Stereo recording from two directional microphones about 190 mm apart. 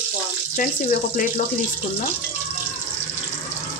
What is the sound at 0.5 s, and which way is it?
Speech, 45° left (ahead or behind).